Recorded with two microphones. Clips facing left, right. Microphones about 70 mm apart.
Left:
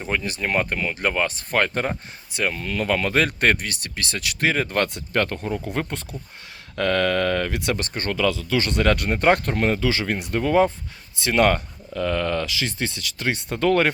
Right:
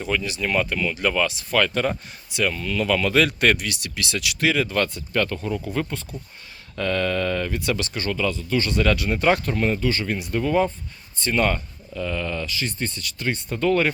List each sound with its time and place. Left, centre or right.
0.0 s speech: left
5.9 s speech: left
7.8 s speech: left
8.1 s speech: left
10.1 s speech: left
11.2 s speech: left